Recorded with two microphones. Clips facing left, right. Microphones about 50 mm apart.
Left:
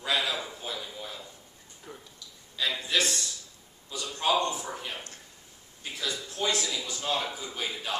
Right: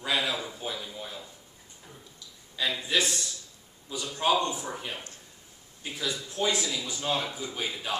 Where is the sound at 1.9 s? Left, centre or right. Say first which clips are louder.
Left 6 dB; left.